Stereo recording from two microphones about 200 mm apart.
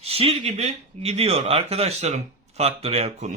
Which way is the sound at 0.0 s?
30° right (ahead or behind).